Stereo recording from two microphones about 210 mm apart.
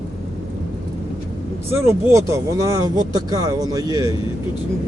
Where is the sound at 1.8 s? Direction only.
15° right (ahead or behind).